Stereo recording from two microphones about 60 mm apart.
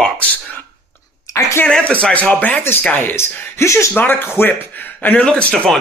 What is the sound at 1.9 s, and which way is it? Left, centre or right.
Speech, left.